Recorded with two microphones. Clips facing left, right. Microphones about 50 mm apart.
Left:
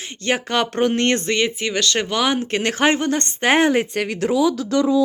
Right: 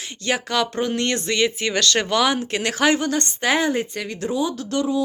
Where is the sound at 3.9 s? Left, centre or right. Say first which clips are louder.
Left 5 dB; left.